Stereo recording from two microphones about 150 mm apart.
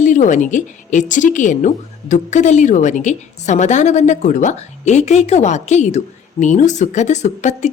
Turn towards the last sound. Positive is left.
turn(degrees=50)  # may be behind; listen again after turning